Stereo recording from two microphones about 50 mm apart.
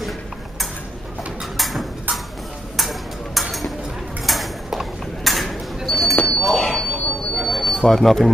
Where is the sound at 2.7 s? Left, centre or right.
Centre.